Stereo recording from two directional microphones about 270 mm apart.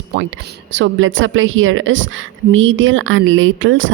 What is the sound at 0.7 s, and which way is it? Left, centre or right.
A woman's voice, right.